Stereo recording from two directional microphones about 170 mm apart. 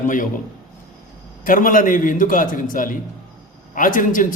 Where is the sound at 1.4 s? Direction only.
55° left (ahead or behind).